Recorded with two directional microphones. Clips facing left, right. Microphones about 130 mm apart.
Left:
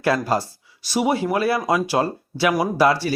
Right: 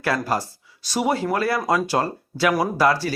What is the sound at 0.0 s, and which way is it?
Speech, 20° left (ahead or behind).